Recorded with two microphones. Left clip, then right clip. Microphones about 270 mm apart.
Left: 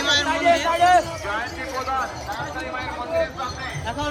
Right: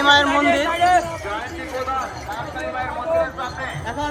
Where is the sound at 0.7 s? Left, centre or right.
Left.